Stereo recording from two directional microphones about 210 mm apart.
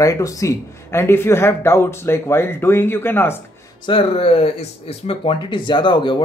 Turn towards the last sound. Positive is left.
turn(degrees=20)  # may be behind; listen again after turning